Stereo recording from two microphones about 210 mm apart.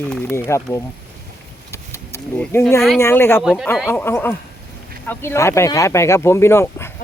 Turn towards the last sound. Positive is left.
turn(degrees=10)  # may be behind; listen again after turning